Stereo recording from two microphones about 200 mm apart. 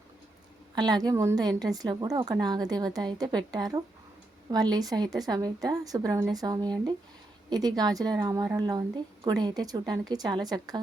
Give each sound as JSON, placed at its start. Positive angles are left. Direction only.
{"t": 0.8, "sound": "a woman's voice", "side_deg": -20}